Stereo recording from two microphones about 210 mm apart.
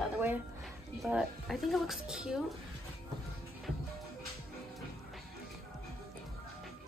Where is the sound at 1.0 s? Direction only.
Centre (ahead or behind).